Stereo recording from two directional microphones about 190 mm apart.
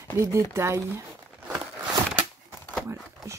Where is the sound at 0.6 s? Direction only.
15° right (ahead or behind).